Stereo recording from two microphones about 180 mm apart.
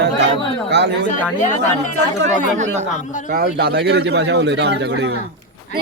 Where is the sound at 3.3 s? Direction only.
60° right (ahead or behind).